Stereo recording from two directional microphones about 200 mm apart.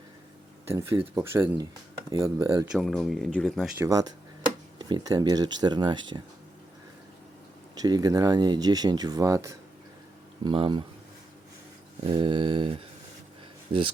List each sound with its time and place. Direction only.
0.7 s speech: 15° right (ahead or behind)
2.7 s speech: centre (ahead or behind)
3.8 s speech: 15° right (ahead or behind)
7.8 s speech: 20° right (ahead or behind)
11.9 s speech: 25° right (ahead or behind)